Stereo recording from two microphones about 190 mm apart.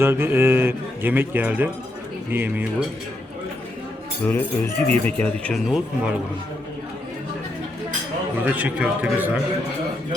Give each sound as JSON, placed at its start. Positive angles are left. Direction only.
{"t": 0.0, "sound": "speech", "side_deg": -10}
{"t": 4.3, "sound": "speech", "side_deg": 10}
{"t": 8.4, "sound": "speech", "side_deg": -10}